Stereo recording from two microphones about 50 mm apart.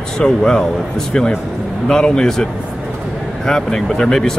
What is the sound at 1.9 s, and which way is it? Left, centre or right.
Speech, centre.